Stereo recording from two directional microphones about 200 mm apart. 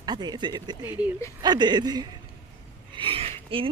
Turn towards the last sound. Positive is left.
turn(degrees=-30)  # may be behind; listen again after turning